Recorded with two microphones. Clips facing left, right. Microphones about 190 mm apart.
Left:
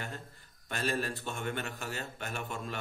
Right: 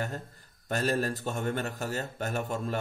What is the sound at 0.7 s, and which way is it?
A man's voice, 40° right (ahead or behind).